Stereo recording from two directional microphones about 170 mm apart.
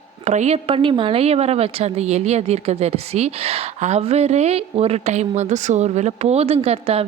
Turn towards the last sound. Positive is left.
turn(degrees=-35)  # may be behind; listen again after turning